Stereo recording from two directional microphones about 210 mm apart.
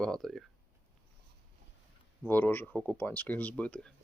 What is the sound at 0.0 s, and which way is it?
Speech, centre (ahead or behind).